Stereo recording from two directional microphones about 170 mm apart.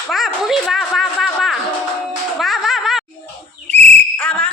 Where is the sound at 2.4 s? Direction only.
Centre (ahead or behind).